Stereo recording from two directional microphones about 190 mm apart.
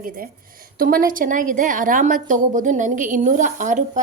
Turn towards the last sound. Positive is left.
turn(degrees=-40)  # may be behind; listen again after turning